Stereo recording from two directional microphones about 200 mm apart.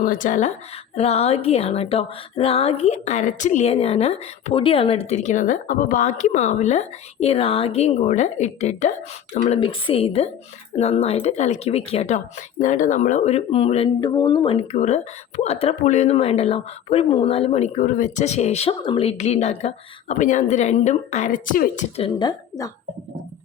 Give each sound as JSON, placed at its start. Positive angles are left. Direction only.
{"t": 0.0, "sound": "a woman's voice", "side_deg": 40}
{"t": 21.9, "sound": "a woman's voice", "side_deg": 25}